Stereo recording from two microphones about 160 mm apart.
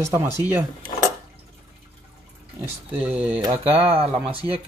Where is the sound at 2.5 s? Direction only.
10° right (ahead or behind).